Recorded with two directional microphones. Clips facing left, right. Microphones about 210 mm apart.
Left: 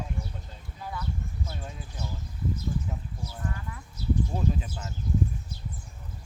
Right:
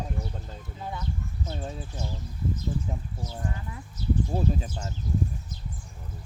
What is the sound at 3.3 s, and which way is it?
Speech, 20° right (ahead or behind).